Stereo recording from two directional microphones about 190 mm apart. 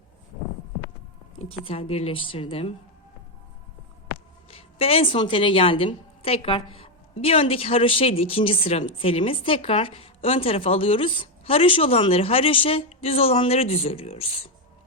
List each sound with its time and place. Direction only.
1.4 s speech: 30° left (ahead or behind)
4.5 s a woman's voice: 30° left (ahead or behind)